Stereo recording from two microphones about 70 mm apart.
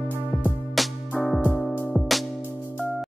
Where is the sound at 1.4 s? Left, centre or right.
Left.